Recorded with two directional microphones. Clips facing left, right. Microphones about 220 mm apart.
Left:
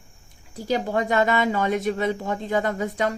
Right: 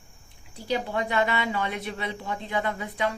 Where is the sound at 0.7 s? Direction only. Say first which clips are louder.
Left 4 dB; 45° left (ahead or behind).